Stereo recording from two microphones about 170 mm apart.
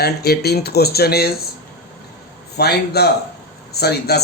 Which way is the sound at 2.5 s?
70° left (ahead or behind).